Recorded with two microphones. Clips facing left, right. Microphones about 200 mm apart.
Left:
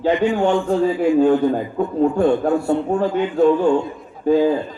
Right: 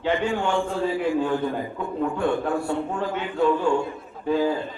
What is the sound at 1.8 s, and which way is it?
A man's voice, 45° left (ahead or behind).